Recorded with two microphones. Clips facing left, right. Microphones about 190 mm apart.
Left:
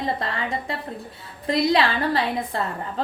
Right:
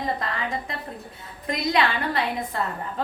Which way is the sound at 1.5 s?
30° left (ahead or behind).